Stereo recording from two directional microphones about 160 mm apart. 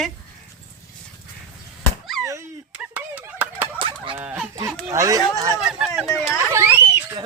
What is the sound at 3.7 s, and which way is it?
Fowl, 30° right (ahead or behind).